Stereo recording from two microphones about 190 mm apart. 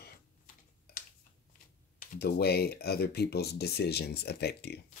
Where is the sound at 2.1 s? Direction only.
55° left (ahead or behind).